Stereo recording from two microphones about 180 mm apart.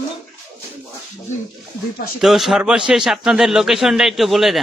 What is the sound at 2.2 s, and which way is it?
A man's voice, centre (ahead or behind).